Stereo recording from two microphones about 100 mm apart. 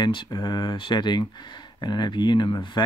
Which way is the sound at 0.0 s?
50° left (ahead or behind).